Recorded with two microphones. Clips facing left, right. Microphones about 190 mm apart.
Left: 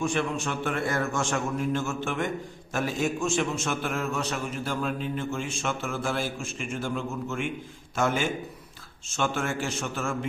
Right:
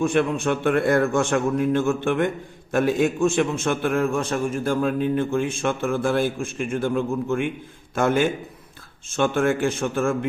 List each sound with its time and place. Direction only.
0.0 s a man's voice: 60° right (ahead or behind)